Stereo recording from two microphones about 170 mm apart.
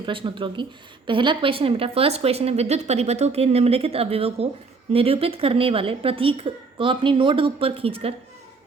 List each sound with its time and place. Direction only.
0.0 s a woman's voice: 30° right (ahead or behind)